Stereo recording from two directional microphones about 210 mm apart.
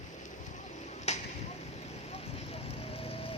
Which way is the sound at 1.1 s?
30° left (ahead or behind).